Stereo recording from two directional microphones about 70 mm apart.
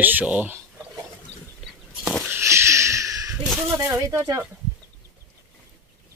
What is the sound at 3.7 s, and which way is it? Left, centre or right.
Speech, right.